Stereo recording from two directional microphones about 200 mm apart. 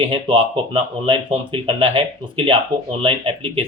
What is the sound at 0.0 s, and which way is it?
Speech, 25° right (ahead or behind).